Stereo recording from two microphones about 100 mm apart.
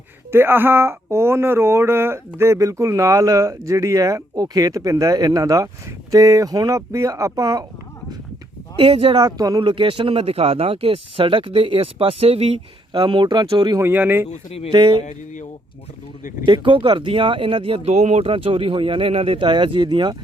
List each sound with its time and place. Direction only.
0.3 s speech: 25° right (ahead or behind)
8.8 s speech: 70° right (ahead or behind)
9.1 s speech: 40° right (ahead or behind)
9.6 s speech: 60° right (ahead or behind)
13.7 s speech: 20° right (ahead or behind)
14.3 s speech: 90° left
14.7 s speech: 50° right (ahead or behind)
16.5 s speech: 60° right (ahead or behind); by 19.5 s 75° right (ahead or behind)
19.5 s speech: 55° right (ahead or behind)